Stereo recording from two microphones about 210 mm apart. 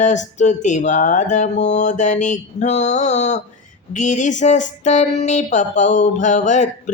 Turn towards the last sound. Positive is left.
turn(degrees=35)  # may be behind; listen again after turning